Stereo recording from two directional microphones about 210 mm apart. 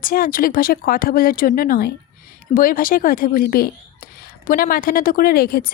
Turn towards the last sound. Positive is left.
turn(degrees=45)  # may be behind; listen again after turning